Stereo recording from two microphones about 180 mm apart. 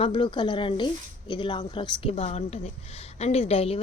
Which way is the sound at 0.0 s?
30° left (ahead or behind).